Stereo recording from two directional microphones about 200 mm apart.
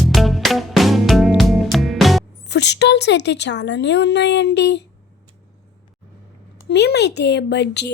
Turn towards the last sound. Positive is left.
turn(degrees=60)  # may be behind; listen again after turning